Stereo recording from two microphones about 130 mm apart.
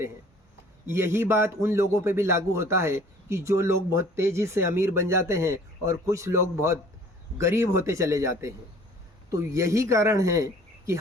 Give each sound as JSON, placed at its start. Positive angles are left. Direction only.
{"t": 0.9, "sound": "a man's voice", "side_deg": -20}